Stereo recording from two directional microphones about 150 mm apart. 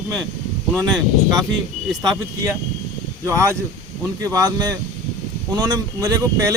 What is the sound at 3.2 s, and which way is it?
Speech, 20° right (ahead or behind).